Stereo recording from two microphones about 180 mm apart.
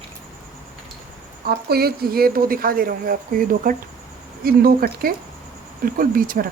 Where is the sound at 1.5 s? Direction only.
60° right (ahead or behind).